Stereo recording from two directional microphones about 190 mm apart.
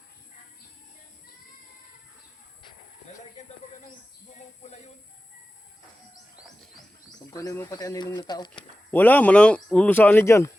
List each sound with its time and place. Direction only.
7.3 s speech: 15° left (ahead or behind)
8.9 s speech: 10° left (ahead or behind)